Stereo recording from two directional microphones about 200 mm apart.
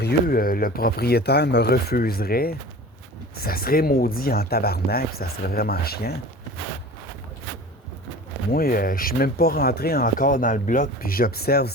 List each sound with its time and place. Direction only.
0.0 s speech: 45° left (ahead or behind)
8.4 s speech: 45° left (ahead or behind)